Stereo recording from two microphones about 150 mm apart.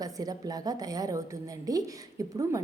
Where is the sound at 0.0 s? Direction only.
25° right (ahead or behind).